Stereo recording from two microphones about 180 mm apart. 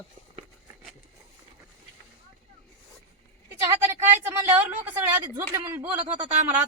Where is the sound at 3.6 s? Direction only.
15° right (ahead or behind).